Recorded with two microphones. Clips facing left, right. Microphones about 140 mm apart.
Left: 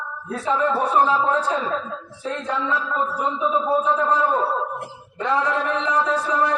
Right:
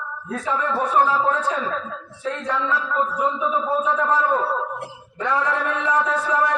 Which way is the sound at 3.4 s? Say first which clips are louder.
Left 2 dB; 25° left (ahead or behind).